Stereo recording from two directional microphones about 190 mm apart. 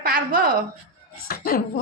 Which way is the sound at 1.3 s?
50° left (ahead or behind).